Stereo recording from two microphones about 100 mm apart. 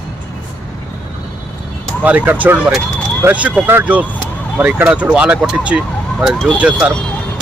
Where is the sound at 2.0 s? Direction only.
15° right (ahead or behind).